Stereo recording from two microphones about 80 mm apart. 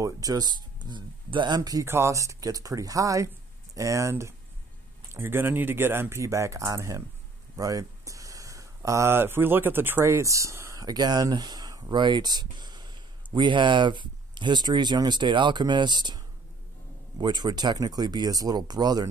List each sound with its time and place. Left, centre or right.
0.0 s speech: right
1.9 s speech: right
10.8 s speech: right